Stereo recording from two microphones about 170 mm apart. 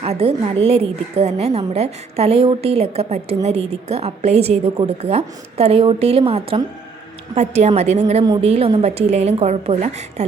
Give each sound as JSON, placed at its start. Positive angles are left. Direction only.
{"t": 0.0, "sound": "a woman's voice", "side_deg": -35}